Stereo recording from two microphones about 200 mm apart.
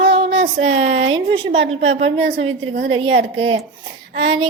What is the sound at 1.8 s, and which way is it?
Speech, 30° right (ahead or behind).